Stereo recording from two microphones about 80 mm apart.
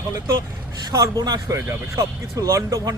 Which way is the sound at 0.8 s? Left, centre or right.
Right.